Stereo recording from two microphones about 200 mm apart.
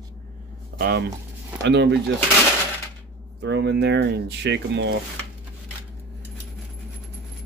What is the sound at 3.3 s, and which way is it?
Speech, 60° right (ahead or behind).